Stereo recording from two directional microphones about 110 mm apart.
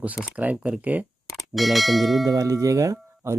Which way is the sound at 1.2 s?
Centre (ahead or behind).